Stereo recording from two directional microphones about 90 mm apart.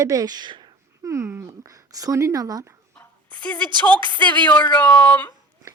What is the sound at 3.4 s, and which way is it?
Speech, 15° left (ahead or behind).